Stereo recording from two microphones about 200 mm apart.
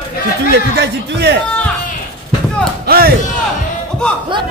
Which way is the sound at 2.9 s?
50° right (ahead or behind).